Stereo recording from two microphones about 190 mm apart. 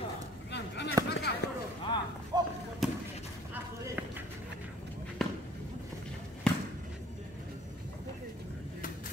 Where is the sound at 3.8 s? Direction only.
10° right (ahead or behind).